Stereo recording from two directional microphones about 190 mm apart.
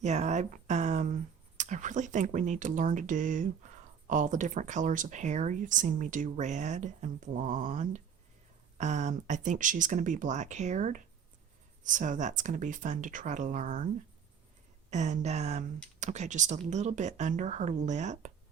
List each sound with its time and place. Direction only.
0.0 s speech: 35° right (ahead or behind)
7.5 s a sound: 45° right (ahead or behind)
8.8 s speech: 35° right (ahead or behind)
14.8 s speech: 40° right (ahead or behind)